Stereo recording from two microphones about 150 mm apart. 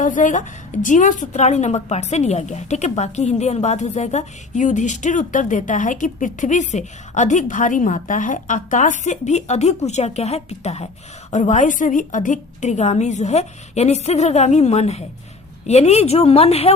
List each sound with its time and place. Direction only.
0.0 s a woman's voice: 60° left (ahead or behind); by 16.7 s 45° left (ahead or behind)